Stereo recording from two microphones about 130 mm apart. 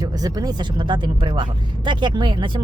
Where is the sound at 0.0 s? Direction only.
30° right (ahead or behind).